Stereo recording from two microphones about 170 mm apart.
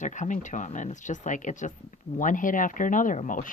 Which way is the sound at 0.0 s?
45° left (ahead or behind).